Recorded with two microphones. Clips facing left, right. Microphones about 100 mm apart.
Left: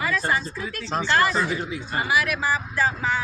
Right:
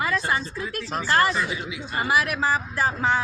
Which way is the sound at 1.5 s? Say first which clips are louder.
Left 3 dB; 40° left (ahead or behind).